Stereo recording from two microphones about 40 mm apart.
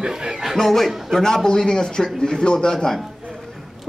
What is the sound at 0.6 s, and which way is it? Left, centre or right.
Speech, centre.